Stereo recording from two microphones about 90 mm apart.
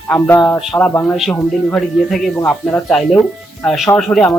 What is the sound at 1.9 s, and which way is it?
Speech, centre (ahead or behind).